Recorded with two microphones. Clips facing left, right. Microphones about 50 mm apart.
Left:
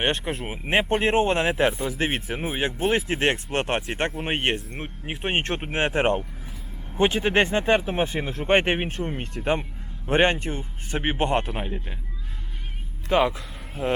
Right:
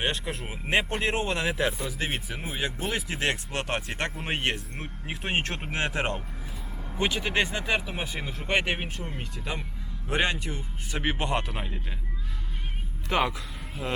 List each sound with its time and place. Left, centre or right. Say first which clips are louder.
0.0 s speech: left 5 dB; left
11.6 s speech: left 5 dB; centre
13.3 s speech: left 2 dB; left